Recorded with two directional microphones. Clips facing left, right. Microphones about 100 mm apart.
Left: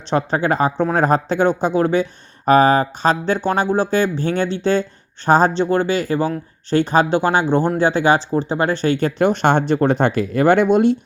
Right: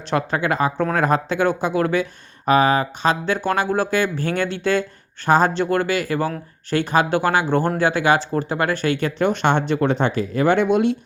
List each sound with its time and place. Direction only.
0.1 s speech: 30° left (ahead or behind)
2.5 s speech: 35° left (ahead or behind)